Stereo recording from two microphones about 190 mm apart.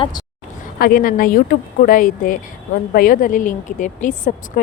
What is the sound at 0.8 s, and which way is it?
Speech, 50° left (ahead or behind).